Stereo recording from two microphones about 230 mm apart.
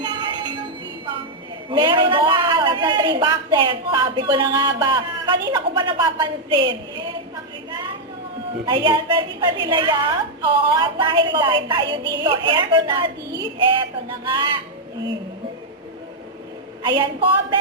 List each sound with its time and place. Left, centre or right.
0.0 s music: centre
1.7 s a man's voice: right
8.6 s a man's voice: centre
14.3 s a man's voice: centre
16.8 s a man's voice: centre